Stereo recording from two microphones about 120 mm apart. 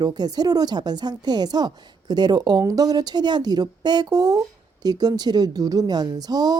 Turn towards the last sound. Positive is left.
turn(degrees=-35)  # may be behind; listen again after turning